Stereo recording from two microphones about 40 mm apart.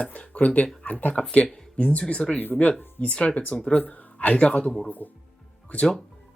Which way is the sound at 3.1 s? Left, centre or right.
Left.